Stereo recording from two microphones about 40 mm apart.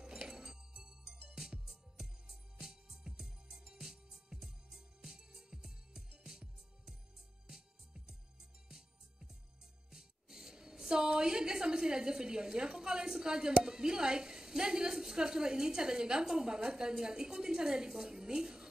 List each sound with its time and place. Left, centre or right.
0.0 s music: centre
9.8 s a woman's voice: centre